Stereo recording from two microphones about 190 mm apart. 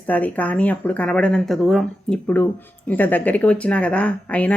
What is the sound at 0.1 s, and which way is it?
Speech, 10° left (ahead or behind).